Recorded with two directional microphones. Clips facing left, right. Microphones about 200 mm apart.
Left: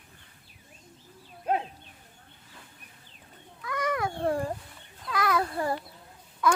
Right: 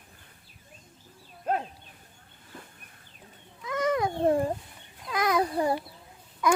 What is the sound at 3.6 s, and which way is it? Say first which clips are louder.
Cat: right 3 dB; 25° right (ahead or behind).